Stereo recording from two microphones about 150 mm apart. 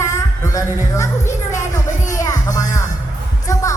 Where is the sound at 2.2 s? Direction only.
25° left (ahead or behind).